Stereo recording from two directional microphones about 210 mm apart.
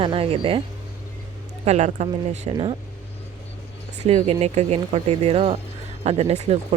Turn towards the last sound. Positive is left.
turn(degrees=-30)  # may be behind; listen again after turning